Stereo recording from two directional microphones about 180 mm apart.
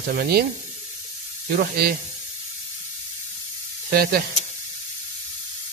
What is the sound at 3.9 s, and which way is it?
Speech, 55° right (ahead or behind).